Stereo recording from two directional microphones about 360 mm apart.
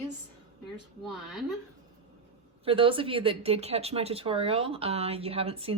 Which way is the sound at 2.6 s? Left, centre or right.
Centre.